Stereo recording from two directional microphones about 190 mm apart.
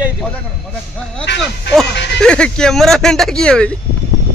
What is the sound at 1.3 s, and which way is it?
Speech, 65° left (ahead or behind).